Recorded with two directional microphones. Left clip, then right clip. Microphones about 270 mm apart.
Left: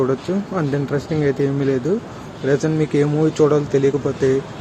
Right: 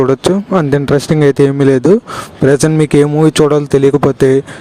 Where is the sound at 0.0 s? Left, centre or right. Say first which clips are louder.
Right 9 dB; right.